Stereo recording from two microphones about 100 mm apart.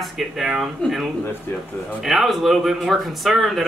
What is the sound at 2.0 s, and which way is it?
Speech, centre (ahead or behind).